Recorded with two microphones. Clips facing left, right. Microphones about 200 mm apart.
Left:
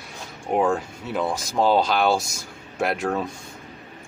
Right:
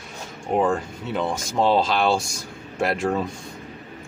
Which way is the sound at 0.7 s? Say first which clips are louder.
Even; 5° left (ahead or behind).